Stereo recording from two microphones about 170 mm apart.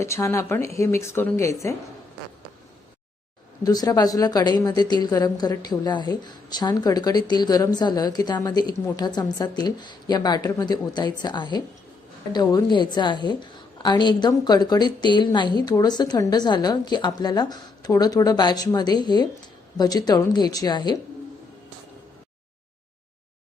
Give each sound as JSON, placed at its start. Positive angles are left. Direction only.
{"t": 0.0, "sound": "speech", "side_deg": 15}
{"t": 3.6, "sound": "speech", "side_deg": 20}